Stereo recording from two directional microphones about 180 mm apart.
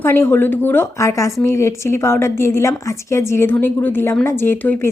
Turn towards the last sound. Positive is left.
turn(degrees=10)  # may be behind; listen again after turning